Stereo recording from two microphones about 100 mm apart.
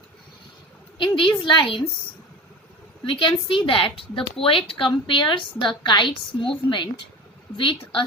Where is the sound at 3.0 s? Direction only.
60° left (ahead or behind).